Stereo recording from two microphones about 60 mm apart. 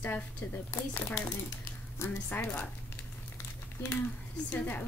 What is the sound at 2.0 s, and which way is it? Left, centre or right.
Speech, left.